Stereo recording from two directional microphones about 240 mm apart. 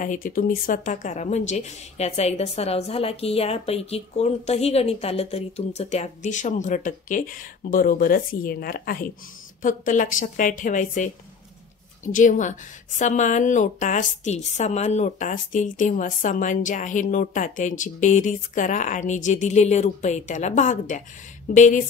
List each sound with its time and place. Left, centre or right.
0.0 s a woman's voice: left